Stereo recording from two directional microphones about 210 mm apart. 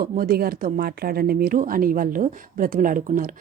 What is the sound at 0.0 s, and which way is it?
Speech, 45° right (ahead or behind).